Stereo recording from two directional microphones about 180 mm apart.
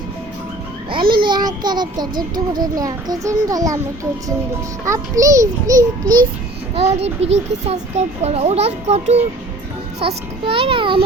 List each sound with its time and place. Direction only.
1.2 s a child's voice: 25° right (ahead or behind)
4.9 s a child's voice: 20° right (ahead or behind)
6.7 s a child's voice: 35° right (ahead or behind)
10.4 s a child's voice: 30° right (ahead or behind)